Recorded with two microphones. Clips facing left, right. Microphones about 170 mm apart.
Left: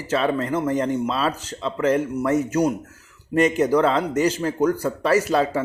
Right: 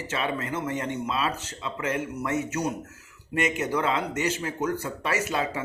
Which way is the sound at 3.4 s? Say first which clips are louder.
Left 9 dB; 35° left (ahead or behind).